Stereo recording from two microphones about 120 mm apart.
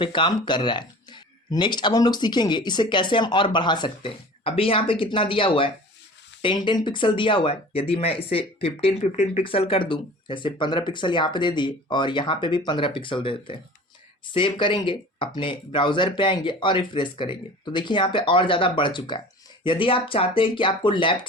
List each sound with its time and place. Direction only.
0.0 s speech: 45° left (ahead or behind)